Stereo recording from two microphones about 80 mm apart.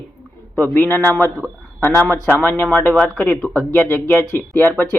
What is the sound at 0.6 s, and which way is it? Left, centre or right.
Speech, left.